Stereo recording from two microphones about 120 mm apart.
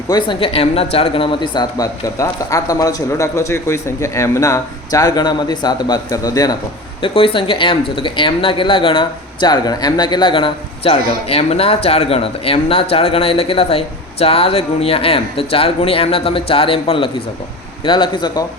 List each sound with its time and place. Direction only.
0.1 s speech: 40° left (ahead or behind)
7.0 s speech: 50° left (ahead or behind)
17.8 s speech: 40° left (ahead or behind)